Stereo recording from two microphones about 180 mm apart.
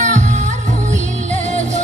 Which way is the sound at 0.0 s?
40° right (ahead or behind).